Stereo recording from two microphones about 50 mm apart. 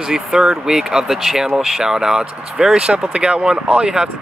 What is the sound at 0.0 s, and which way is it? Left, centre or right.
Speech, centre.